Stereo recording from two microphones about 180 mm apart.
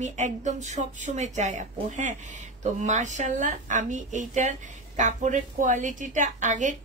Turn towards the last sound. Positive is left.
turn(degrees=-45)  # may be behind; listen again after turning